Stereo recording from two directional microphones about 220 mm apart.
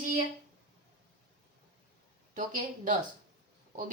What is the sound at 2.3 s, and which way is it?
Speech, 35° right (ahead or behind).